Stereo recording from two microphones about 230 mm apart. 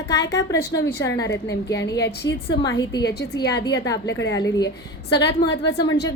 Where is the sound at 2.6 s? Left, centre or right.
Centre.